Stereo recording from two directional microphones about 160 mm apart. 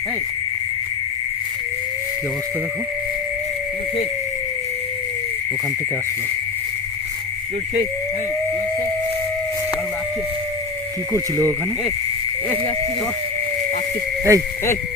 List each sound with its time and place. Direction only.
11.1 s speech: 15° right (ahead or behind)
14.3 s speech: 15° right (ahead or behind)